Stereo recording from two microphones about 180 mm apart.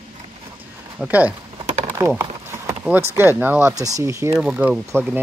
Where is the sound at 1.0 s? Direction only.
10° right (ahead or behind).